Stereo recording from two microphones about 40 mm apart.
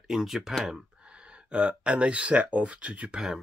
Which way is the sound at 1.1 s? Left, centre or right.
Right.